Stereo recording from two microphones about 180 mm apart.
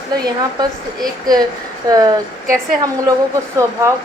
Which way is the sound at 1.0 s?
20° right (ahead or behind).